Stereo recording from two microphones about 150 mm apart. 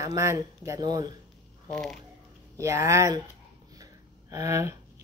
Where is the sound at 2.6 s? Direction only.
20° right (ahead or behind).